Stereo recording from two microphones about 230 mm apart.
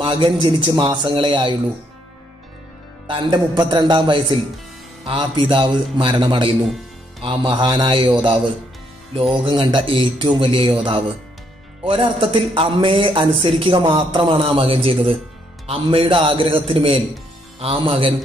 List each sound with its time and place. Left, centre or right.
0.0 s a man's voice: centre
3.1 s a man's voice: centre